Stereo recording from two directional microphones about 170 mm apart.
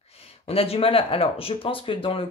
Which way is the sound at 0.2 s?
35° left (ahead or behind).